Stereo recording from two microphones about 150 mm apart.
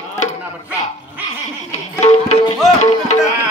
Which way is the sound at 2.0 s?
50° left (ahead or behind).